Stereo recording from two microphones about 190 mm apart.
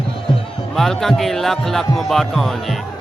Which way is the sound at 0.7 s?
Centre (ahead or behind).